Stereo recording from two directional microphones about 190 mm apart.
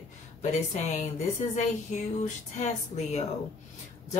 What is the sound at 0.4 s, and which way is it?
Speech, 40° left (ahead or behind).